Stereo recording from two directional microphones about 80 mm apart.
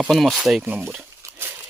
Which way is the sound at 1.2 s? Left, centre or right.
Right.